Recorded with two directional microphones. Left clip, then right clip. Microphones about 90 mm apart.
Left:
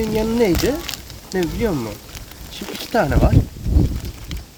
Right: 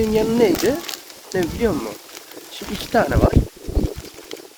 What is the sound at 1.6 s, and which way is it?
Speech, 30° right (ahead or behind).